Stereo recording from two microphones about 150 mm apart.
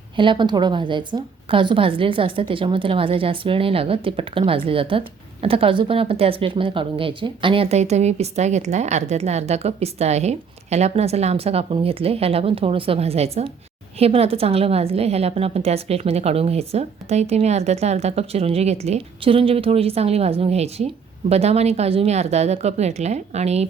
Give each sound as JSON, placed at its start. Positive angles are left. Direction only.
{"t": 0.2, "sound": "a woman's voice", "side_deg": -30}